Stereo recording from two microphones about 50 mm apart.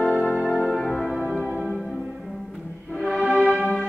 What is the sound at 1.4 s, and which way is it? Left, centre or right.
Music, centre.